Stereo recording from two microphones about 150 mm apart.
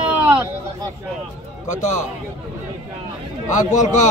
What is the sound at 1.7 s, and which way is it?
Speech, 55° left (ahead or behind).